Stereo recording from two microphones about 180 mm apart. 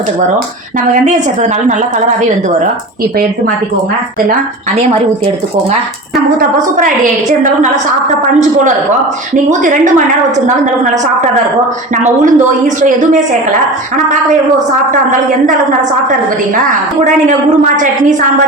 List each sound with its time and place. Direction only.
6.3 s a woman's voice: 50° right (ahead or behind)
9.5 s a woman's voice: 45° right (ahead or behind)
12.0 s a woman's voice: 45° right (ahead or behind)